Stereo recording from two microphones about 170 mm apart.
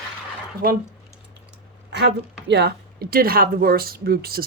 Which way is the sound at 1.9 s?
90° right.